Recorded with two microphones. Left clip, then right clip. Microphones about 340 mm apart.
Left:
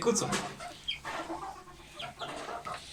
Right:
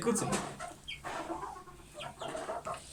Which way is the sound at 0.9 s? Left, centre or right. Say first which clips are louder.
Left 11 dB; right.